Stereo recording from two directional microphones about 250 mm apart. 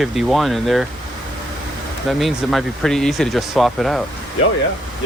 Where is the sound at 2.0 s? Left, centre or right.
Centre.